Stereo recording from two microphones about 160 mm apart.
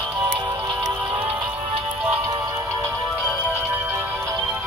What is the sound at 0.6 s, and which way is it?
Music, 30° right (ahead or behind).